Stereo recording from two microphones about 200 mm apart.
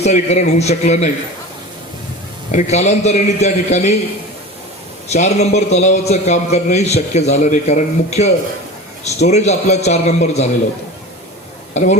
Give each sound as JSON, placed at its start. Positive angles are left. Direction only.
{"t": 0.0, "sound": "a man's voice", "side_deg": 35}
{"t": 2.5, "sound": "a man's voice", "side_deg": 35}
{"t": 5.0, "sound": "a man's voice", "side_deg": 35}
{"t": 11.7, "sound": "speech", "side_deg": 35}